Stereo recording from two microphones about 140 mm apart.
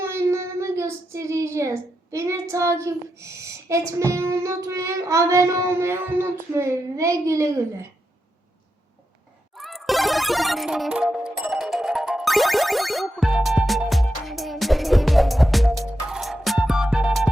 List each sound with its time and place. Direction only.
0.0 s child singing: 20° right (ahead or behind)
9.6 s music: centre (ahead or behind)